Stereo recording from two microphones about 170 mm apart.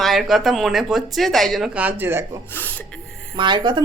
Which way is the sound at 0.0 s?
Centre (ahead or behind).